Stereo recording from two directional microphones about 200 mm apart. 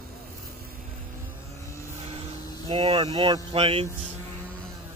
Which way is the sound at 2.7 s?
30° right (ahead or behind).